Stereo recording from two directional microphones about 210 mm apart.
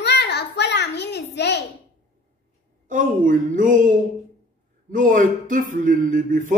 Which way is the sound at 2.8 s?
40° right (ahead or behind).